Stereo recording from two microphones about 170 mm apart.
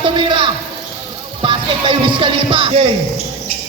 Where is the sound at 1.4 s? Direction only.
30° right (ahead or behind).